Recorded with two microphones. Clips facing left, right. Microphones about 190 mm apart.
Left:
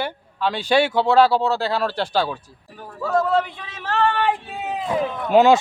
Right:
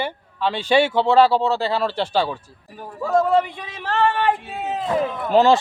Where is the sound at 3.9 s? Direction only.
5° right (ahead or behind).